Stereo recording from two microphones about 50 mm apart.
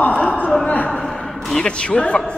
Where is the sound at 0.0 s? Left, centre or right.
Centre.